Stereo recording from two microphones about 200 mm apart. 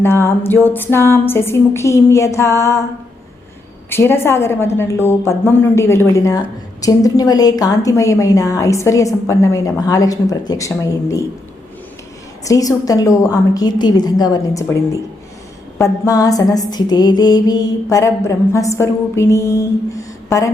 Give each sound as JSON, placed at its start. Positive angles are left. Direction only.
{"t": 0.0, "sound": "music", "side_deg": 10}
{"t": 3.8, "sound": "music", "side_deg": 10}
{"t": 12.5, "sound": "music", "side_deg": 15}
{"t": 15.8, "sound": "music", "side_deg": 15}